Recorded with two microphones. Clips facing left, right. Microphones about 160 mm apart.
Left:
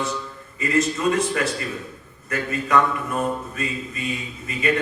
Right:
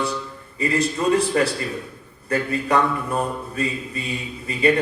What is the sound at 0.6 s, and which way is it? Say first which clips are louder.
Mantra: even; 35° right (ahead or behind).